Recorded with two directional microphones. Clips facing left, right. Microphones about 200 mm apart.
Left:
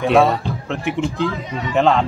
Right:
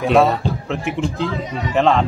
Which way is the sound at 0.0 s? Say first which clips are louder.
Even; centre (ahead or behind).